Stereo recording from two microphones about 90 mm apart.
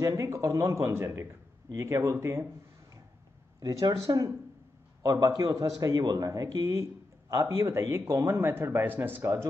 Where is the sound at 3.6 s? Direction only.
40° right (ahead or behind).